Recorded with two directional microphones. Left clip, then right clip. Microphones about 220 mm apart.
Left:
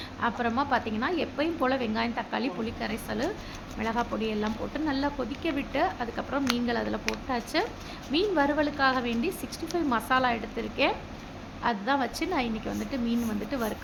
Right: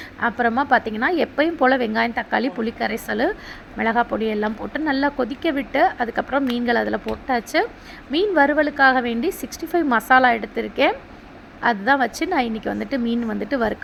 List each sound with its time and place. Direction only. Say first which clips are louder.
0.2 s a woman's voice: right 8 dB; 25° right (ahead or behind)